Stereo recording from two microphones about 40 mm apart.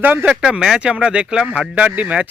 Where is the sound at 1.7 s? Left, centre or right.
Right.